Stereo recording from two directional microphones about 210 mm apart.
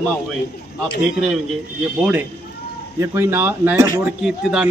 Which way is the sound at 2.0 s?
5° right (ahead or behind).